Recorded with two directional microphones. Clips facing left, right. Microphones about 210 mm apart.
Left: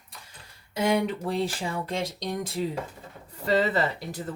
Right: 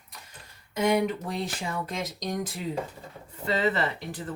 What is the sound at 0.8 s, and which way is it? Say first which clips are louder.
Speech: even; 30° left (ahead or behind).